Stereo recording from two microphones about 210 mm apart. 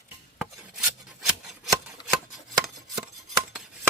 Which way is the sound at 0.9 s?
Centre (ahead or behind).